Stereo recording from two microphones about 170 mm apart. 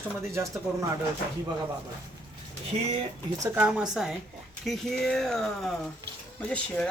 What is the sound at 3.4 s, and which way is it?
Speech, 15° right (ahead or behind).